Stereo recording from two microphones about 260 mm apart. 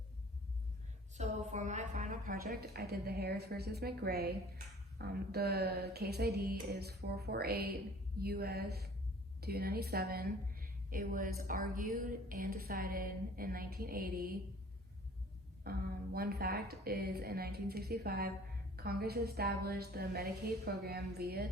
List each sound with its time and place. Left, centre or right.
1.1 s a woman's voice: right
15.6 s a woman's voice: right